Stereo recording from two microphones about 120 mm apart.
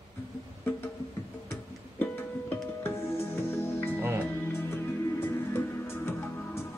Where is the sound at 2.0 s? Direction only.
15° left (ahead or behind).